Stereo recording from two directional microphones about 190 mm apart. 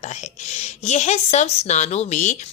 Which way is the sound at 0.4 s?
35° left (ahead or behind).